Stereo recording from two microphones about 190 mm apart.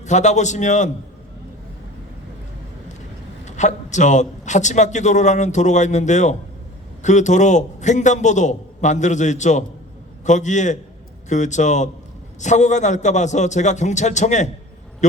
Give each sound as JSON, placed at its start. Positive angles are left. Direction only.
{"t": 0.0, "sound": "a man's voice", "side_deg": 40}
{"t": 3.4, "sound": "a man's voice", "side_deg": 40}